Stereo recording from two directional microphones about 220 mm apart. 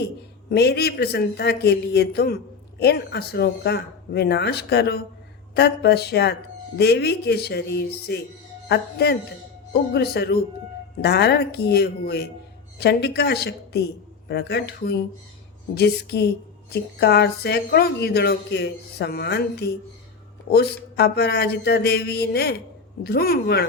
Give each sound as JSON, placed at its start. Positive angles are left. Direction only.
{"t": 0.5, "sound": "a man's voice", "side_deg": 50}